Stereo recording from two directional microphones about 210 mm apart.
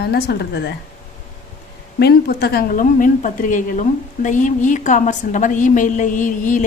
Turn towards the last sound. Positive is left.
turn(degrees=40)  # may be behind; listen again after turning